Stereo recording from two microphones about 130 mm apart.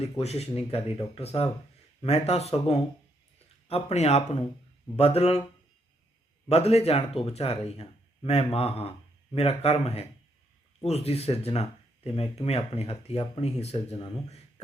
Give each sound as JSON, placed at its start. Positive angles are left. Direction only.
{"t": 0.0, "sound": "speech", "side_deg": 55}
{"t": 6.5, "sound": "speech", "side_deg": 55}